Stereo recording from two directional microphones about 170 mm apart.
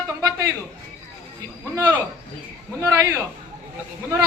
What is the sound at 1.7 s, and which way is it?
A man's voice, 10° right (ahead or behind).